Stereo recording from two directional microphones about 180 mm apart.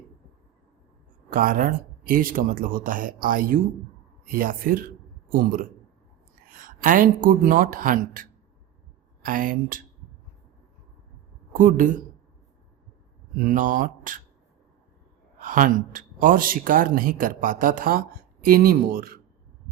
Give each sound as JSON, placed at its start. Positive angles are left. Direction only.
{"t": 1.3, "sound": "speech", "side_deg": -50}
{"t": 11.5, "sound": "speech", "side_deg": -50}
{"t": 13.3, "sound": "speech", "side_deg": -50}
{"t": 15.4, "sound": "speech", "side_deg": -50}